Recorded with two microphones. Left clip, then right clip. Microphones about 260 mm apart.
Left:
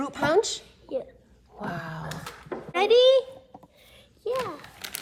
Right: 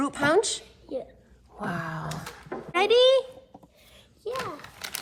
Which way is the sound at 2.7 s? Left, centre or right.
Right.